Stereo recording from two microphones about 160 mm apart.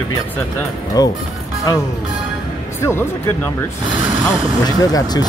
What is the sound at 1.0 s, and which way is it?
Speech, 25° left (ahead or behind).